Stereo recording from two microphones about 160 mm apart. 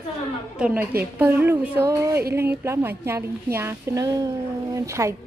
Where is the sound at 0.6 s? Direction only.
10° right (ahead or behind).